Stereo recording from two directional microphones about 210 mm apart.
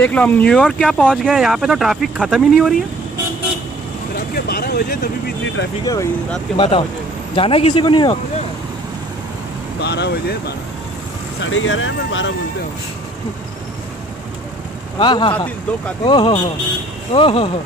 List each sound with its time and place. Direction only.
0.0 s speech: 5° left (ahead or behind)
4.5 s a sound: 45° left (ahead or behind)
6.5 s speech: 25° left (ahead or behind)
9.8 s speech: 50° left (ahead or behind)
11.4 s speech: 70° left (ahead or behind)
15.0 s speech: 20° left (ahead or behind)